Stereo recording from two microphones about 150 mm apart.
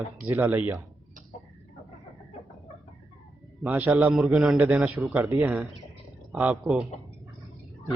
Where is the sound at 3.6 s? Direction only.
10° right (ahead or behind).